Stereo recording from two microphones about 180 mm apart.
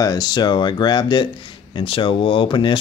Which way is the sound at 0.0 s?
20° left (ahead or behind).